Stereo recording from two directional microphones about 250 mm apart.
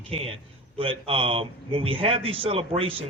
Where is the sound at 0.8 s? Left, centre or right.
Right.